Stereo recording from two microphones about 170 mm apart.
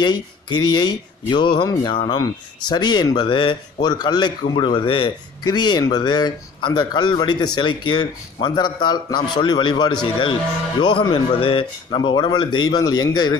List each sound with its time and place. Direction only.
0.0 s speech: 25° left (ahead or behind)